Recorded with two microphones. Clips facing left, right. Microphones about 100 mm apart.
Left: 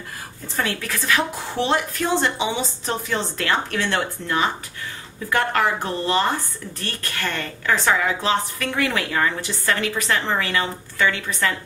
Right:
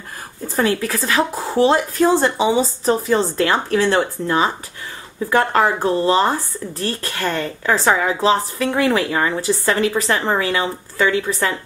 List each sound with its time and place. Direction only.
0.6 s speech: 35° right (ahead or behind)